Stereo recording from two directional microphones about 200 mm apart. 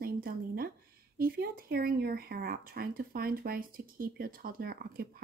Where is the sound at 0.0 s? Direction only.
50° right (ahead or behind).